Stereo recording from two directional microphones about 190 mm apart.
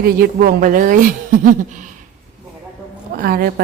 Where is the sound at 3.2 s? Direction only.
50° right (ahead or behind).